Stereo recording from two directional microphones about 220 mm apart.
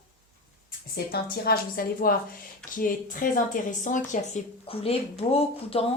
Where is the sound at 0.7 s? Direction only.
45° left (ahead or behind).